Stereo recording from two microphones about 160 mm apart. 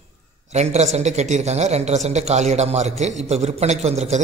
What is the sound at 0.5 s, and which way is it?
A man's voice, 45° right (ahead or behind).